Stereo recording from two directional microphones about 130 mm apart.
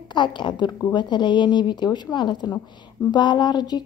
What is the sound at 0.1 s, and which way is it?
A woman's voice, 35° left (ahead or behind).